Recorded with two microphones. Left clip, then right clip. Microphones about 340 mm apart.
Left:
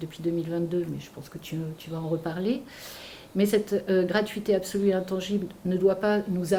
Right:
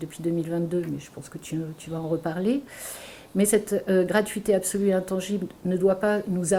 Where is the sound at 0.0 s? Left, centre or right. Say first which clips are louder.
Right 1 dB; right.